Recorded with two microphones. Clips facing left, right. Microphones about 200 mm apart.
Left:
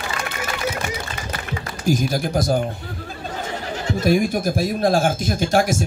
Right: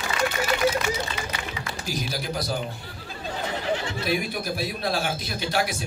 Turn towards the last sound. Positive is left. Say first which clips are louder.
# left 8 dB
turn(degrees=45)  # may be behind; listen again after turning